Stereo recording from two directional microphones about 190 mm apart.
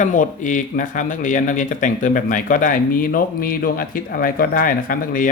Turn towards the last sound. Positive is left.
turn(degrees=45)  # may be behind; listen again after turning